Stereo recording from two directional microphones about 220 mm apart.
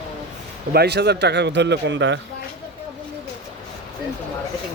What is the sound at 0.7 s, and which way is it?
Speech, 45° right (ahead or behind).